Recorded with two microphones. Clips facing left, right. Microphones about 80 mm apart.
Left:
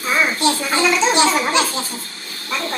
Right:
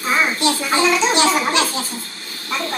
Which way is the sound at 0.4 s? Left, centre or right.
Centre.